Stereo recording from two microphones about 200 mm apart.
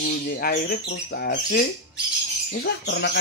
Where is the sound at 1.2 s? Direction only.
50° left (ahead or behind).